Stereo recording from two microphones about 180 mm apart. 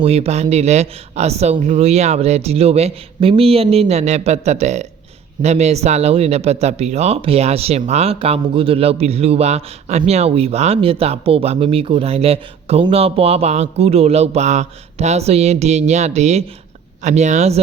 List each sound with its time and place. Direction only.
0.0 s speech: 35° right (ahead or behind)